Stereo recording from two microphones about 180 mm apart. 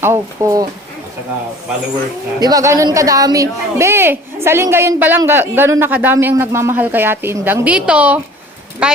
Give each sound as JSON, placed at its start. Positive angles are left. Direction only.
{"t": 0.0, "sound": "a man's voice", "side_deg": -15}
{"t": 2.4, "sound": "a man's voice", "side_deg": -20}